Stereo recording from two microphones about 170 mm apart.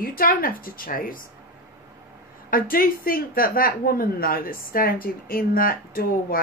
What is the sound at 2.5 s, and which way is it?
A woman's voice, 55° left (ahead or behind).